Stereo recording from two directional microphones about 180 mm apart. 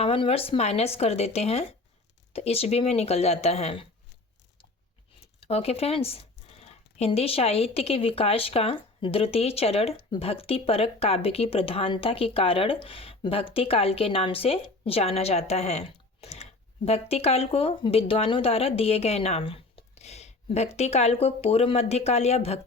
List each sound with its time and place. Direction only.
0.0 s speech: 35° left (ahead or behind)
5.4 s speech: 35° left (ahead or behind)